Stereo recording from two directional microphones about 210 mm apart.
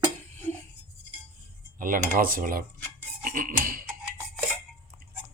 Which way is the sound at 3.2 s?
40° right (ahead or behind).